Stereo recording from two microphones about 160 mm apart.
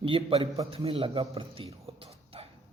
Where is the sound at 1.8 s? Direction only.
40° right (ahead or behind).